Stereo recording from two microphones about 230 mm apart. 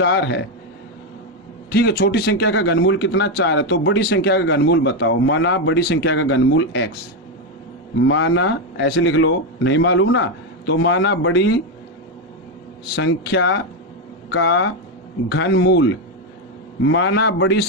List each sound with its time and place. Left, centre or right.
0.0 s speech: left
1.7 s speech: left
8.0 s speech: left
13.0 s speech: left